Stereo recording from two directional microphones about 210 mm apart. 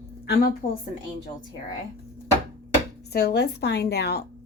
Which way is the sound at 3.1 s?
50° left (ahead or behind).